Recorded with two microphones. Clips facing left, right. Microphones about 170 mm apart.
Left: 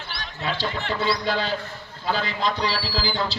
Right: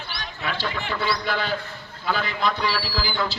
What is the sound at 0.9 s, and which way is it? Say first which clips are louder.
A man's voice: left 2 dB; 25° left (ahead or behind).